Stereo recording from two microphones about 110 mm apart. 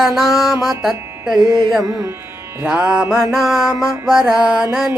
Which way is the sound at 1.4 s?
40° right (ahead or behind).